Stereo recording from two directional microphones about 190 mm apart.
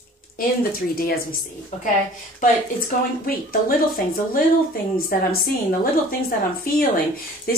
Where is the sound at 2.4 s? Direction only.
50° left (ahead or behind).